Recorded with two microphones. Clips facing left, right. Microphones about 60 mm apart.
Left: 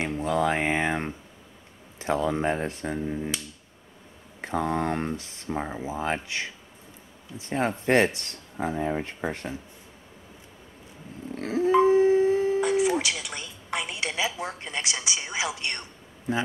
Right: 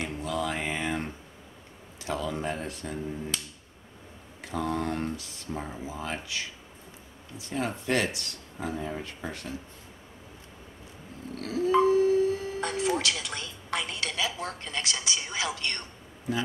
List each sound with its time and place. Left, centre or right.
0.0 s a sound: left
2.0 s speech: left
4.4 s speech: left
11.3 s dog: left
12.5 s a woman's voice: centre